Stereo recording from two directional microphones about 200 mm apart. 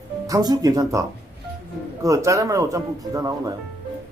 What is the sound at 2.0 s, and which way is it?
Speech, 15° right (ahead or behind).